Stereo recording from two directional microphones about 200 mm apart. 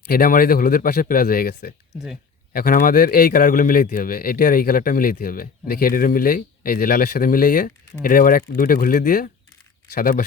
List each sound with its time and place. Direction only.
0.1 s a man's voice: 50° left (ahead or behind)